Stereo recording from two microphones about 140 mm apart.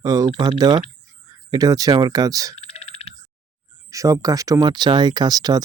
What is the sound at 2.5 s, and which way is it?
Frog, 50° left (ahead or behind).